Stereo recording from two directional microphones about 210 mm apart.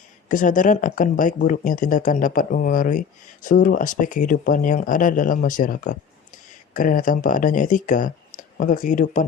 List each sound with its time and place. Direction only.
0.3 s speech: 40° left (ahead or behind)